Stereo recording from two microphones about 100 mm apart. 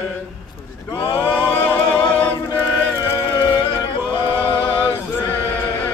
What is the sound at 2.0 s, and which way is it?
Music, 20° left (ahead or behind).